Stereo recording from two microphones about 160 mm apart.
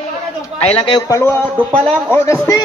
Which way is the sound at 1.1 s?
15° left (ahead or behind).